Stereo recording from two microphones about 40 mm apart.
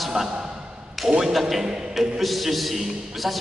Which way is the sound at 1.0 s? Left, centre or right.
Centre.